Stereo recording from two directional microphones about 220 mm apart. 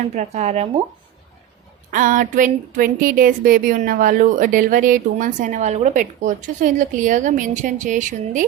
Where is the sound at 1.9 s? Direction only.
35° right (ahead or behind).